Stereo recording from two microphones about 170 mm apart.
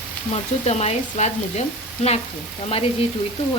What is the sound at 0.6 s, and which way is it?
Speech, 40° left (ahead or behind).